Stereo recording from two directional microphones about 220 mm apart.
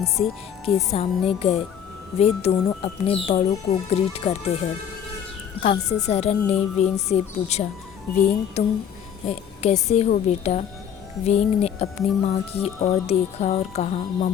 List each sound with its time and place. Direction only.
0.2 s music: 25° left (ahead or behind)
5.9 s music: 30° left (ahead or behind)